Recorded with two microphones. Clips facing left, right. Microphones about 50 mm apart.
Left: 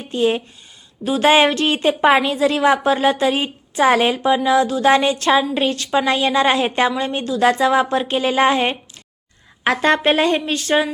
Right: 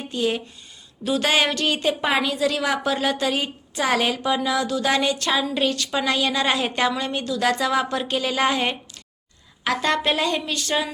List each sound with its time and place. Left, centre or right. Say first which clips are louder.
0.1 s a woman's voice: left 6 dB; left